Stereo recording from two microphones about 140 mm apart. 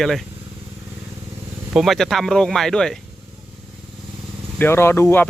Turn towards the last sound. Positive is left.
turn(degrees=20)  # may be behind; listen again after turning